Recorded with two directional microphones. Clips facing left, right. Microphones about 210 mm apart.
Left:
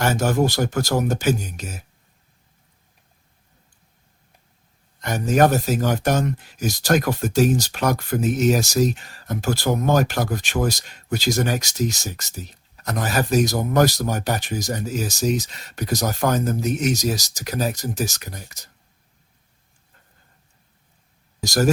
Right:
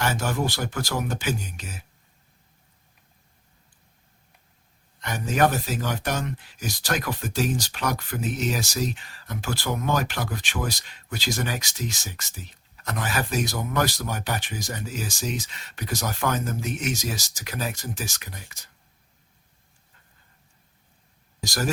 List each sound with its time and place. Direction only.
0.0 s speech: 45° left (ahead or behind)
4.9 s speech: 45° left (ahead or behind)
21.4 s speech: 45° left (ahead or behind)